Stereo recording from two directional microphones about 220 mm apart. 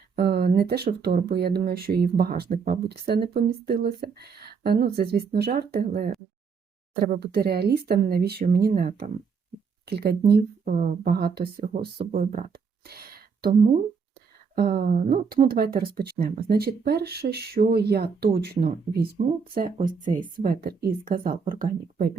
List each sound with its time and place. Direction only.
0.2 s a woman's voice: 45° right (ahead or behind)